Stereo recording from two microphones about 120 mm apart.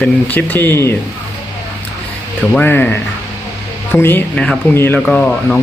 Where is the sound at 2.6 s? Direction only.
15° left (ahead or behind).